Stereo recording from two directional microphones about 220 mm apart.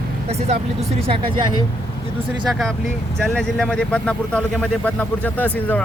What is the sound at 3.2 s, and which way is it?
Speech, 5° left (ahead or behind).